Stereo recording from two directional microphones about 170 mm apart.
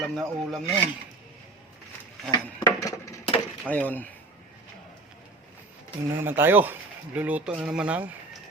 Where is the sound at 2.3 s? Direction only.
20° left (ahead or behind).